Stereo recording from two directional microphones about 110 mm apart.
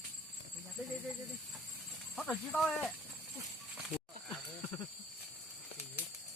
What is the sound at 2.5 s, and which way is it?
Speech, centre (ahead or behind).